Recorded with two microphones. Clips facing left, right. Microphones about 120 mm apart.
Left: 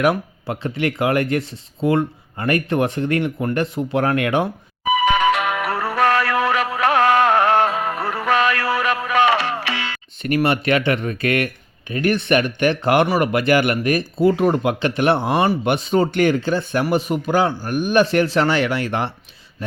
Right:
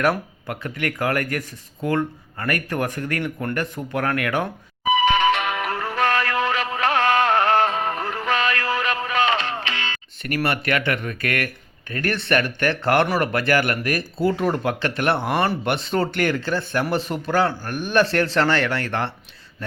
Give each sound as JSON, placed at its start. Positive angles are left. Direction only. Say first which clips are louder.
{"t": 0.4, "sound": "speech", "louder": "left 5 dB", "side_deg": 25}
{"t": 5.0, "sound": "music", "louder": "left 3 dB", "side_deg": 40}
{"t": 7.8, "sound": "music", "louder": "left 1 dB", "side_deg": -45}
{"t": 8.0, "sound": "a sound", "louder": "left 8 dB", "side_deg": 45}
{"t": 9.1, "sound": "music", "louder": "left 5 dB", "side_deg": 60}
{"t": 10.2, "sound": "speech", "louder": "left 5 dB", "side_deg": 20}